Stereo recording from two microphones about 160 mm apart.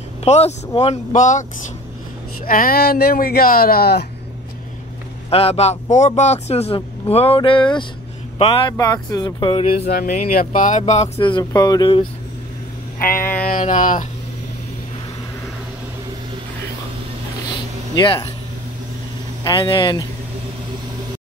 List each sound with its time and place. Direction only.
0.2 s speech: 40° left (ahead or behind)
2.4 s speech: 60° left (ahead or behind)
5.3 s a man's voice: 40° left (ahead or behind)
8.7 s speech: 20° left (ahead or behind)
10.0 s speech: 55° left (ahead or behind)
11.2 s speech: 25° left (ahead or behind)
13.0 s a sound: 60° left (ahead or behind)
17.9 s a man's voice: 30° left (ahead or behind)
19.4 s speech: 30° left (ahead or behind)